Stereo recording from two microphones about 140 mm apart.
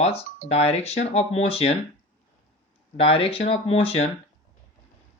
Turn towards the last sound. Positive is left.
turn(degrees=45)  # may be behind; listen again after turning